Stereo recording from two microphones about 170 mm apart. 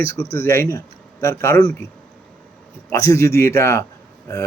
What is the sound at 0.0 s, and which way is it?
Speech, 15° left (ahead or behind).